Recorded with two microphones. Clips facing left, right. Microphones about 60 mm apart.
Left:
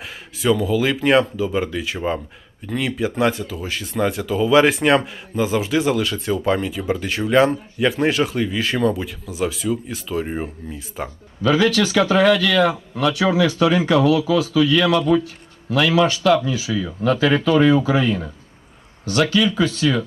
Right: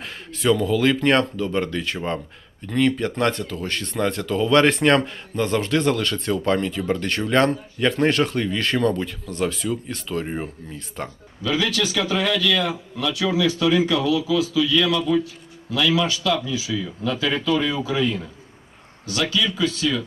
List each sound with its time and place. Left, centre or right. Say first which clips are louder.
0.0 s speech: left 1 dB; centre
11.4 s a man's voice: left 6 dB; left